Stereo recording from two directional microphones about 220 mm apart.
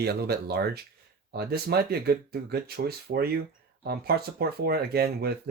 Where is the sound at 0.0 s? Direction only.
45° right (ahead or behind).